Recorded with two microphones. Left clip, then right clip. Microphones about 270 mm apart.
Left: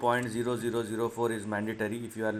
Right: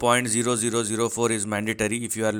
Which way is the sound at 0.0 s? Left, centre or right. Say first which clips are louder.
Right 7 dB; right.